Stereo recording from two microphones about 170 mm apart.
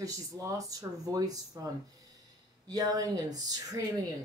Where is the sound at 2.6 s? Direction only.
20° right (ahead or behind).